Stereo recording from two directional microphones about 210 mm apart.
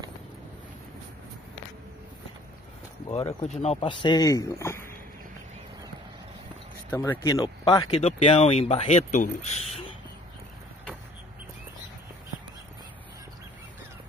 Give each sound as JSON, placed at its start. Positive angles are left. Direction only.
{"t": 3.4, "sound": "speech", "side_deg": 30}
{"t": 6.9, "sound": "speech", "side_deg": 15}